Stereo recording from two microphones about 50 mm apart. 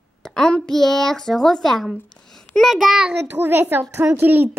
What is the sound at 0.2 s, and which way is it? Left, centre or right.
A woman's voice, centre.